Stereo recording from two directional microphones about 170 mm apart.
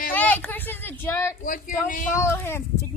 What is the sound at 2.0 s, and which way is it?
Speech, 15° left (ahead or behind).